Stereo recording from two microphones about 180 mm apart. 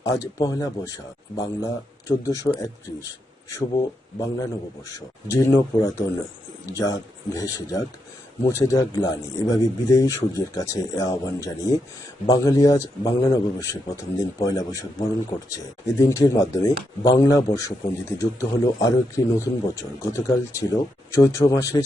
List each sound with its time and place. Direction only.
0.0 s a man's voice: 20° left (ahead or behind)
4.9 s a man's voice: 15° left (ahead or behind)